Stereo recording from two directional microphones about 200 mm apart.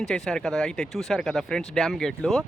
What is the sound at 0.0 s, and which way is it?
Speech, 5° left (ahead or behind).